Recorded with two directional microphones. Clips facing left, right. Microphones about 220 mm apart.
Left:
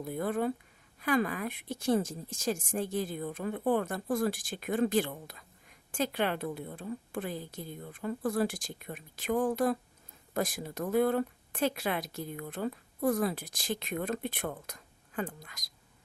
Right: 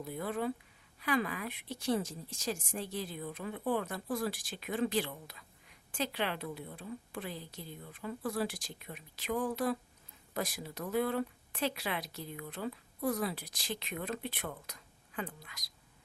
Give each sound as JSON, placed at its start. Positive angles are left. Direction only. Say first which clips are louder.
{"t": 0.0, "sound": "a woman's voice", "louder": "left 4 dB", "side_deg": 45}